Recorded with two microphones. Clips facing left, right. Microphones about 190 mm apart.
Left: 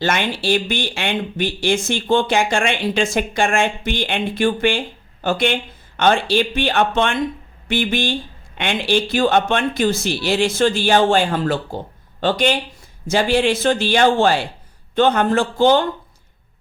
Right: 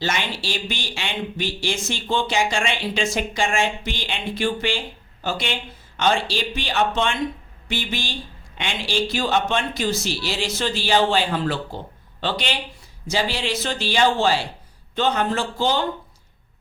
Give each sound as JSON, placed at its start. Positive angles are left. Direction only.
{"t": 0.0, "sound": "speech", "side_deg": 55}